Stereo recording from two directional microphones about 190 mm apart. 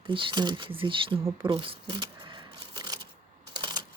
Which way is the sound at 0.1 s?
25° right (ahead or behind).